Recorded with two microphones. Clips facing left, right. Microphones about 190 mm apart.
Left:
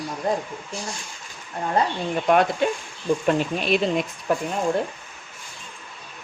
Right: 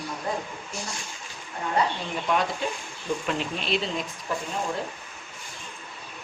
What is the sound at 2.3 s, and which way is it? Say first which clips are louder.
Speech: left 7 dB; 60° left (ahead or behind).